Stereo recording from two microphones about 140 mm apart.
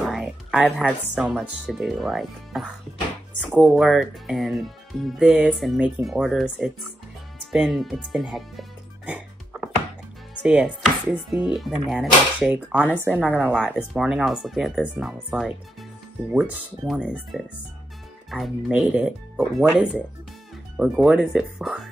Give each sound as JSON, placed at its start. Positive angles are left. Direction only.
{"t": 0.0, "sound": "speech", "side_deg": 0}
{"t": 9.1, "sound": "music", "side_deg": 0}
{"t": 10.4, "sound": "chopping", "side_deg": -5}
{"t": 12.8, "sound": "speech", "side_deg": 15}
{"t": 13.1, "sound": "chopping", "side_deg": -10}
{"t": 13.6, "sound": "speech", "side_deg": 0}
{"t": 16.3, "sound": "chopping", "side_deg": -5}
{"t": 17.0, "sound": "speech", "side_deg": 5}